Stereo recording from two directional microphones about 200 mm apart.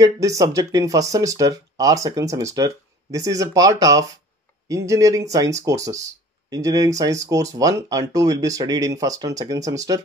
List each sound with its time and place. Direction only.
0.0 s speech: 15° right (ahead or behind)